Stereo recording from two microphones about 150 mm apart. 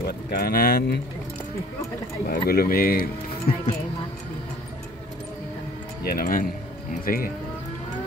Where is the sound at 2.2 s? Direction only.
90° left.